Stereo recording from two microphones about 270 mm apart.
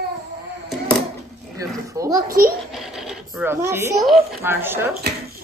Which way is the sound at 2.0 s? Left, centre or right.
Centre.